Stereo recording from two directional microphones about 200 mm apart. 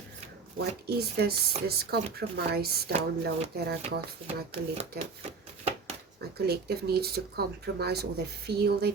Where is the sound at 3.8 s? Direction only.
30° right (ahead or behind).